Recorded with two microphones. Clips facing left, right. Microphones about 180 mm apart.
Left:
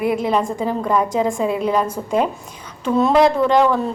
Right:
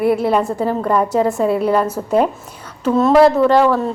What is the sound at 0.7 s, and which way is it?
Speech, 10° left (ahead or behind).